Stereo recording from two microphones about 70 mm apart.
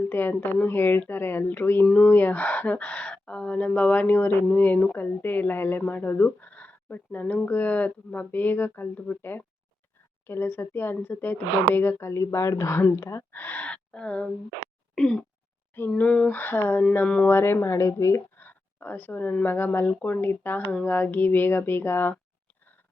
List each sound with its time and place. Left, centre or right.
0.1 s speech: left
13.3 s speech: left
14.9 s a sound: centre
16.0 s speech: left
18.3 s speech: left